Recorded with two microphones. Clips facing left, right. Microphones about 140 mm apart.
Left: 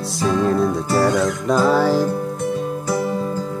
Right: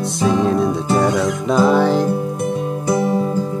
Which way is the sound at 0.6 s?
20° right (ahead or behind).